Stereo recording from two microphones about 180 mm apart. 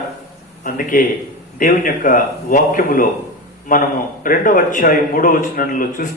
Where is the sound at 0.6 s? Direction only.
50° left (ahead or behind).